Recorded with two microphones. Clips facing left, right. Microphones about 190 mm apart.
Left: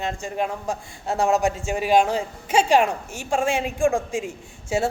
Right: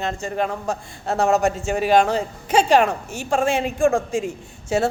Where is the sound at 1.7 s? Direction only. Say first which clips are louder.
Right 2 dB; 10° left (ahead or behind).